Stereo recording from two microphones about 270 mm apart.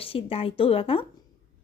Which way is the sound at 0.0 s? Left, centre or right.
Left.